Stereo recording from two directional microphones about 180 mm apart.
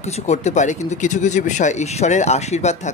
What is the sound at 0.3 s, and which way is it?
Speech, 40° left (ahead or behind).